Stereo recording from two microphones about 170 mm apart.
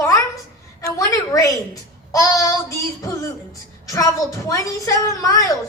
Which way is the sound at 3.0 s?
20° left (ahead or behind).